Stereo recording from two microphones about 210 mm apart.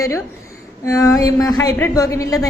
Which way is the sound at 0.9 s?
15° left (ahead or behind).